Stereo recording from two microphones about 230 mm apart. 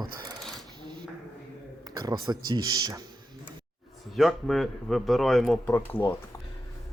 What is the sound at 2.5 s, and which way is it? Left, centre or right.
Speech, centre.